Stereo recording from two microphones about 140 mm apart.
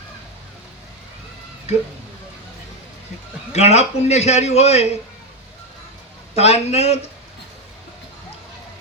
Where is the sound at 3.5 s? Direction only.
50° left (ahead or behind).